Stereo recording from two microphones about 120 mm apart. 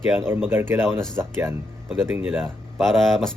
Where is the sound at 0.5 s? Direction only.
20° right (ahead or behind).